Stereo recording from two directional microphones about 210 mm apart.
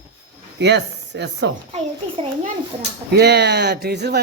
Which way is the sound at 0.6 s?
55° right (ahead or behind).